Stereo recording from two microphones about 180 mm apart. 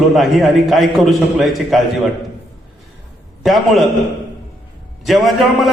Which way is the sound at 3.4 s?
Centre (ahead or behind).